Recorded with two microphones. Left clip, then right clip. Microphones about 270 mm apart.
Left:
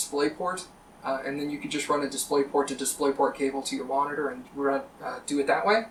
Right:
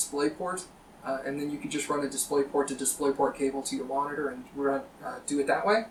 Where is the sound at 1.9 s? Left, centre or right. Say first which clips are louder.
Left 4 dB; centre.